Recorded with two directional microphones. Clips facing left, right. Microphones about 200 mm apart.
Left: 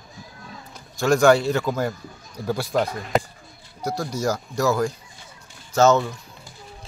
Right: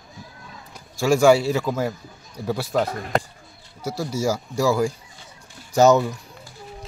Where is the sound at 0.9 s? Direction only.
5° right (ahead or behind).